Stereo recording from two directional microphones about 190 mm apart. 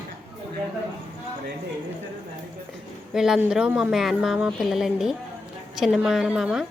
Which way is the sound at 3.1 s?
5° right (ahead or behind).